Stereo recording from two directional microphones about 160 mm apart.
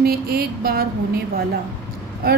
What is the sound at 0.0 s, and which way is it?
A woman's voice, 75° right (ahead or behind).